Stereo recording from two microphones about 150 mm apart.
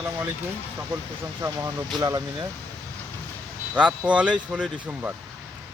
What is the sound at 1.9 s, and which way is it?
Speech, 25° right (ahead or behind).